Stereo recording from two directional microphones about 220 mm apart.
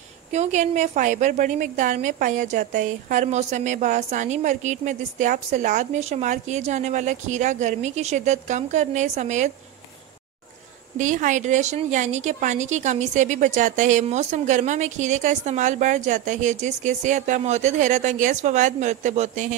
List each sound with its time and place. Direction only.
0.3 s a woman's voice: 30° right (ahead or behind)
11.0 s a woman's voice: 35° right (ahead or behind)